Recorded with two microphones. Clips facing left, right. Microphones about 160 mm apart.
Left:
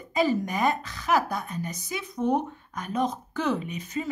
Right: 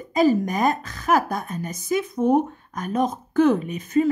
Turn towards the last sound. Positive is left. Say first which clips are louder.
# right 11 dB
turn(degrees=-50)  # may be behind; listen again after turning